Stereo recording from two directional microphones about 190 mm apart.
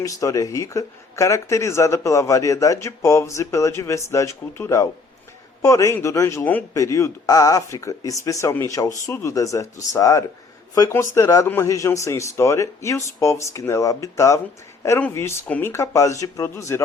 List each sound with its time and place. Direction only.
0.0 s speech: 15° left (ahead or behind)